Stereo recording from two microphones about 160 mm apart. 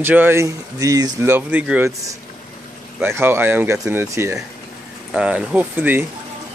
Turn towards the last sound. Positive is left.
turn(degrees=-10)  # may be behind; listen again after turning